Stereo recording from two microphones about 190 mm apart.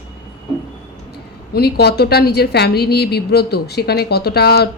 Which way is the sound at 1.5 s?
55° left (ahead or behind).